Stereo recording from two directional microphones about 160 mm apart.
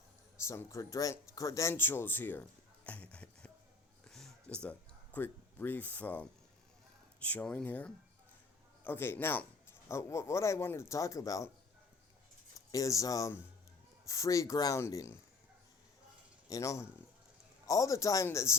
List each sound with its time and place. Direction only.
0.4 s speech: 20° left (ahead or behind)
2.8 s clip-clop: 10° left (ahead or behind)
4.0 s a sound: centre (ahead or behind)
7.2 s speech: 10° left (ahead or behind)
12.7 s speech: 20° left (ahead or behind)
16.5 s speech: 20° left (ahead or behind)